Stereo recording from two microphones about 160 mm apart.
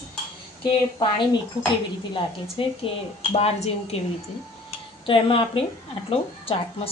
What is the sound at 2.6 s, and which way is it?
Speech, 35° left (ahead or behind).